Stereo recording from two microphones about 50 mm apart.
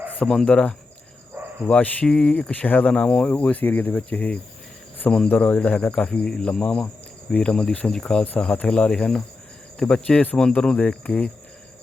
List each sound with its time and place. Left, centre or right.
0.4 s speech: centre
1.4 s cricket: right
1.8 s speech: left
2.0 s speech: centre
2.3 s speech: left
2.9 s speech: centre
3.2 s speech: left
6.1 s speech: centre
8.4 s speech: left
10.8 s speech: left